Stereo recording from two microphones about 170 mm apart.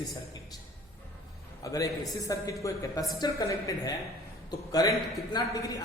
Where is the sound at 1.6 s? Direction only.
20° left (ahead or behind).